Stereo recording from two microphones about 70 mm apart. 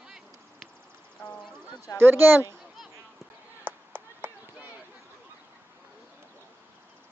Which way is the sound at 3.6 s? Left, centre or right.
Right.